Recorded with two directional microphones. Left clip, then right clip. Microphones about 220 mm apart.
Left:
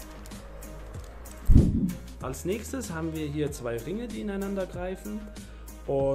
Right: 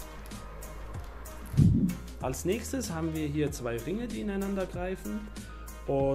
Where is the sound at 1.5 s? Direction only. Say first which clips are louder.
Left 3 dB; centre (ahead or behind).